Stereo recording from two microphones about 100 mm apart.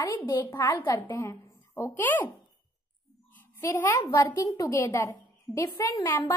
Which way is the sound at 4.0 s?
35° left (ahead or behind).